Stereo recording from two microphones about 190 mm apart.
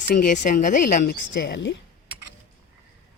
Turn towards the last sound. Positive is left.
turn(degrees=60)  # may be behind; listen again after turning